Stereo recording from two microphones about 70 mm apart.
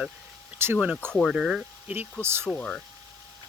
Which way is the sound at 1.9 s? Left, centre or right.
Right.